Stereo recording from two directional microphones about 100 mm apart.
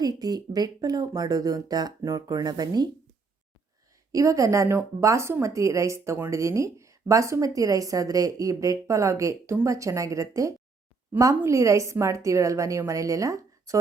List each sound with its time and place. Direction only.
0.0 s a woman's voice: 40° right (ahead or behind)
4.1 s a woman's voice: 35° right (ahead or behind)